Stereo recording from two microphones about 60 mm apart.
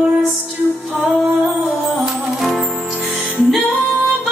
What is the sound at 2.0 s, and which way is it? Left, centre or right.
Music, centre.